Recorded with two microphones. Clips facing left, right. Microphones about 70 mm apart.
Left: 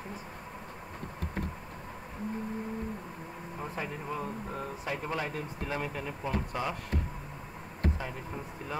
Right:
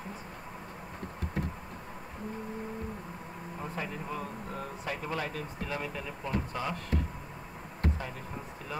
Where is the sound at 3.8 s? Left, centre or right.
Left.